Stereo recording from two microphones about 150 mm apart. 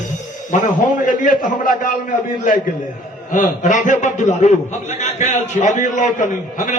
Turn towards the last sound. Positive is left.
turn(degrees=55)  # may be behind; listen again after turning